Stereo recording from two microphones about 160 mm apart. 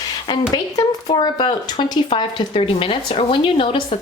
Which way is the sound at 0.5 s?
25° left (ahead or behind).